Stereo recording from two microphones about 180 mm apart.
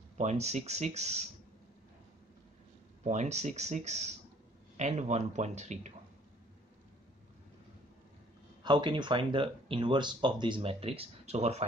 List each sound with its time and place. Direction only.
0.2 s speech: 40° right (ahead or behind)
3.0 s speech: 40° right (ahead or behind)
8.6 s speech: 25° right (ahead or behind)